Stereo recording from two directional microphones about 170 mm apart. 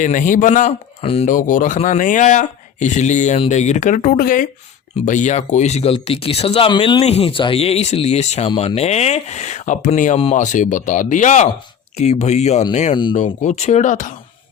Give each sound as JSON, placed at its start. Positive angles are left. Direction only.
{"t": 0.0, "sound": "speech", "side_deg": 50}
{"t": 1.0, "sound": "speech", "side_deg": 35}
{"t": 1.3, "sound": "speech", "side_deg": 50}